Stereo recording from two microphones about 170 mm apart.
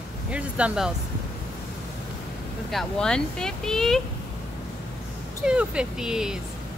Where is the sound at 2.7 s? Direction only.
5° left (ahead or behind).